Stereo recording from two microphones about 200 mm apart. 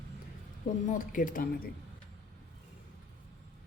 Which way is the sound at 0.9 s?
40° left (ahead or behind).